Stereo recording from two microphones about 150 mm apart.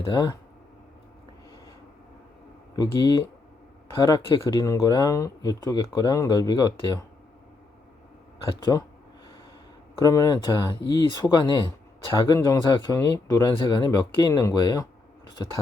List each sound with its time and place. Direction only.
0.0 s speech: 30° left (ahead or behind)
2.7 s speech: 25° left (ahead or behind)
8.7 s speech: 20° left (ahead or behind)
10.0 s speech: 25° left (ahead or behind)